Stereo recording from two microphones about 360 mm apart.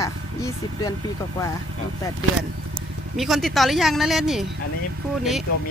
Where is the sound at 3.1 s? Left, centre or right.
Centre.